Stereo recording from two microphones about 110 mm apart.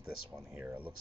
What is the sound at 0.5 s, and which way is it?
Speech, 15° right (ahead or behind).